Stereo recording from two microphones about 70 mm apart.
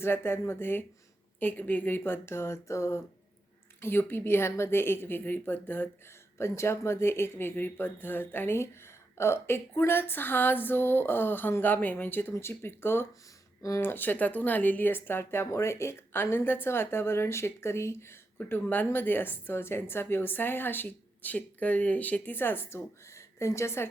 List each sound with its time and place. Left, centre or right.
0.0 s a woman's voice: left
6.4 s a woman's voice: left
13.6 s speech: left
13.8 s a woman's voice: left
18.3 s a woman's voice: left